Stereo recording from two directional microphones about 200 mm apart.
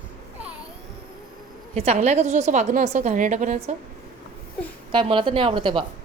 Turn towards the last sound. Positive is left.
turn(degrees=-25)  # may be behind; listen again after turning